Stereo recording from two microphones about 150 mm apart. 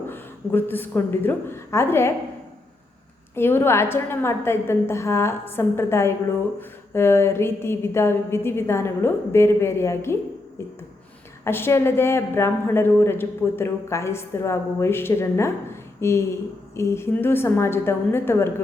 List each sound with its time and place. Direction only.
0.1 s a woman's voice: 15° left (ahead or behind)
3.3 s a woman's voice: 15° left (ahead or behind)